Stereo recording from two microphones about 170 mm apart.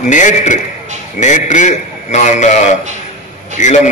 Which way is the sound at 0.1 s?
45° left (ahead or behind).